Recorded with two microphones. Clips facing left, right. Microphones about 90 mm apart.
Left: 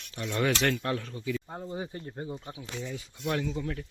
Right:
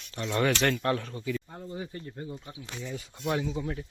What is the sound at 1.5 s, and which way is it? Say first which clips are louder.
Speech: left 2 dB; 25° left (ahead or behind).